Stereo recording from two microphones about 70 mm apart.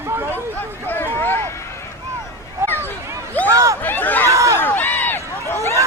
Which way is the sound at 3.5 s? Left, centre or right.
Right.